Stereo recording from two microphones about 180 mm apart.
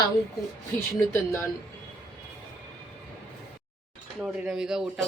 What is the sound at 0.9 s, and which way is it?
Speech, 15° left (ahead or behind).